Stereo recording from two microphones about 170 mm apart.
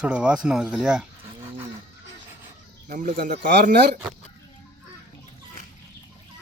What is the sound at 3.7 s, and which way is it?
Speech, 75° right (ahead or behind).